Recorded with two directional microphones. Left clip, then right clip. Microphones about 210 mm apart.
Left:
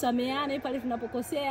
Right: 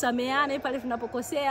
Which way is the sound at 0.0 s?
5° right (ahead or behind).